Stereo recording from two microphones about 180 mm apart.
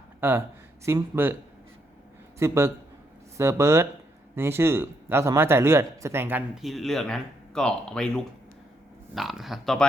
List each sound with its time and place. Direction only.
0.2 s speech: 10° right (ahead or behind)
2.4 s speech: 15° right (ahead or behind)
6.6 s speech: centre (ahead or behind)